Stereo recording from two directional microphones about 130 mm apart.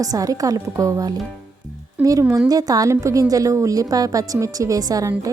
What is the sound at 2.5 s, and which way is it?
A woman's voice, 30° right (ahead or behind).